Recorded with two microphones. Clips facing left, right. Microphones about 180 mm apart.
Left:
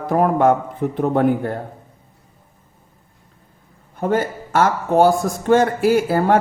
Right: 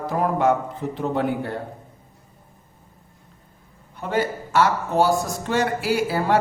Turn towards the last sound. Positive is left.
turn(degrees=50)  # may be behind; listen again after turning